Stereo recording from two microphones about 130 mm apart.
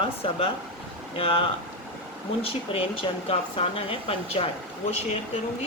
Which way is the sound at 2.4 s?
45° left (ahead or behind).